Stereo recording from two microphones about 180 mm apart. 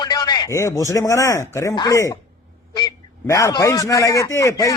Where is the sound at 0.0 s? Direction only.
20° left (ahead or behind).